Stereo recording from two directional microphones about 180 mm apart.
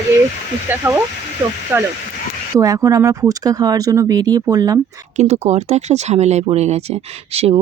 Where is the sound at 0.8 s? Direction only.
10° right (ahead or behind).